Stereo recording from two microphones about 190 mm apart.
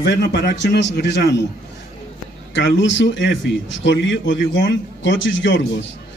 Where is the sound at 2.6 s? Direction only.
75° left (ahead or behind).